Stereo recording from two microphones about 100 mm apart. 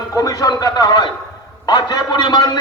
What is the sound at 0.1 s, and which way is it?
A man's voice, 35° left (ahead or behind).